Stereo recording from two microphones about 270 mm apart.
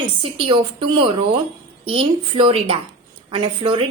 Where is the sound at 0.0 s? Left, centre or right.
Centre.